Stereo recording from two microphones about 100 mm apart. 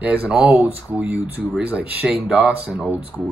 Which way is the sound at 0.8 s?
15° right (ahead or behind).